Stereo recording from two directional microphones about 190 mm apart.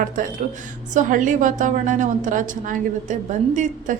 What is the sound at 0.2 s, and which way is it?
A woman's voice, 45° right (ahead or behind).